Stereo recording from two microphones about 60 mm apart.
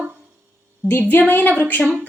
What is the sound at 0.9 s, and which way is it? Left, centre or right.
Speech, left.